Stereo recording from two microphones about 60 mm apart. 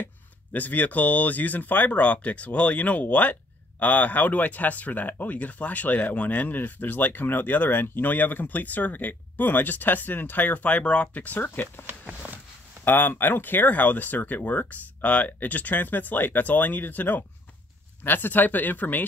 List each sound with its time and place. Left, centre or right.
0.0 s speech: left
12.8 s speech: left